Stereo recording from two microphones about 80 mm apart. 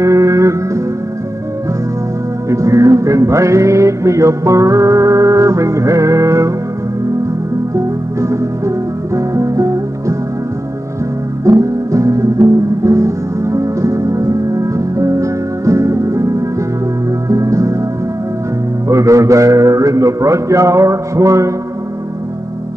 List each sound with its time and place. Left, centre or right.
0.0 s music: right
2.5 s music: right
7.7 s music: right
11.4 s music: right
18.9 s a man's voice: right